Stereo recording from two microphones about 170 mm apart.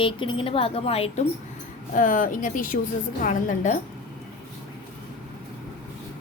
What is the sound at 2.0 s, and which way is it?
A woman's voice, 50° left (ahead or behind).